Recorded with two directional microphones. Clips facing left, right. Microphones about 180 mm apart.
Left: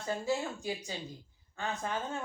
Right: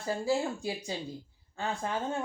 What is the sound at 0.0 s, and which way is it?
Speech, 30° right (ahead or behind).